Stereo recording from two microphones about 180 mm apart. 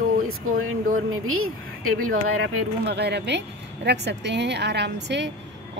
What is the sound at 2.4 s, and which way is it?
Speech, 70° right (ahead or behind).